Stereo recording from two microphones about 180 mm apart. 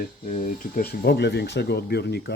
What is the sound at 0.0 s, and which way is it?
Speech, 45° left (ahead or behind).